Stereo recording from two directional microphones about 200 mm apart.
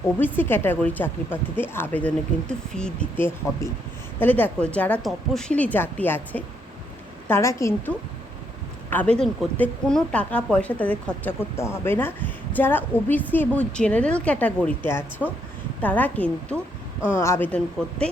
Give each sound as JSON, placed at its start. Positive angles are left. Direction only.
{"t": 0.3, "sound": "speech", "side_deg": 10}